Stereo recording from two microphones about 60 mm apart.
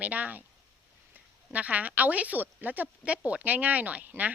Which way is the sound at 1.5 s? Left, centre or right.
Right.